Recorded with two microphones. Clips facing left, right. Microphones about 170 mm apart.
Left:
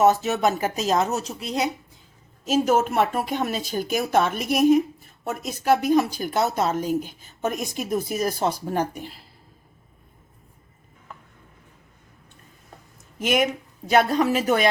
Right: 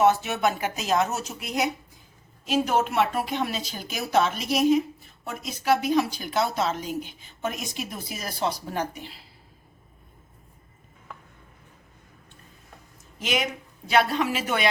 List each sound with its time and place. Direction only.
0.0 s speech: 40° left (ahead or behind)
2.4 s a woman's voice: 45° left (ahead or behind)
13.1 s a woman's voice: 50° left (ahead or behind)